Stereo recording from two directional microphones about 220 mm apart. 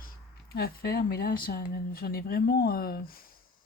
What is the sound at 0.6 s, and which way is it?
Speech, 45° left (ahead or behind).